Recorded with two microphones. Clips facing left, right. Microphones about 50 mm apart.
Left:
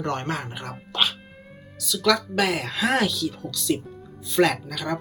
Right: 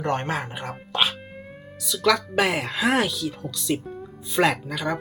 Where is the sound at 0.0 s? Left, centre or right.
Centre.